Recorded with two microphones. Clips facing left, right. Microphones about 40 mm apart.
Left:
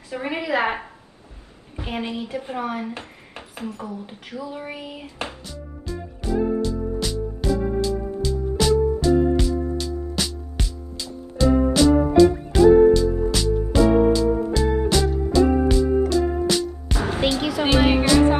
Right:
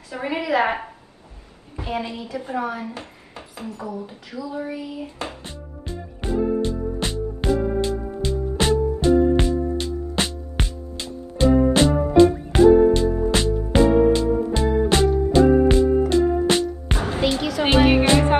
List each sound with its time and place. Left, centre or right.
0.2 s a woman's voice: left
1.8 s speech: left
5.4 s music: right
17.4 s speech: centre
17.6 s speech: right